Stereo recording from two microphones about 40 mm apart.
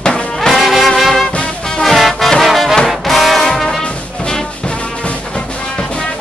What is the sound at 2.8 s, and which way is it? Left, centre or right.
Brass instrument, centre.